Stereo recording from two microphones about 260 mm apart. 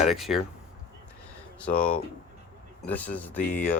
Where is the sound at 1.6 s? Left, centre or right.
Centre.